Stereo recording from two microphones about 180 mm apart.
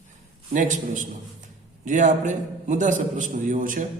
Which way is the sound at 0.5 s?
45° right (ahead or behind).